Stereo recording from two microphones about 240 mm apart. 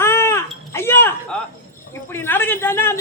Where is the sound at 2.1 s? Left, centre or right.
Centre.